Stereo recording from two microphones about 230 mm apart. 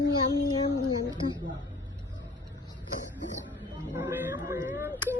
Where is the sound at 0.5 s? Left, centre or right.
Centre.